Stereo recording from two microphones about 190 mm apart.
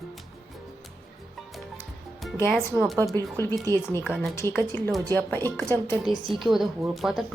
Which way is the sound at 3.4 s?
20° right (ahead or behind).